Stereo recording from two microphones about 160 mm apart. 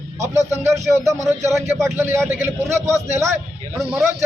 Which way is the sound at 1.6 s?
15° right (ahead or behind).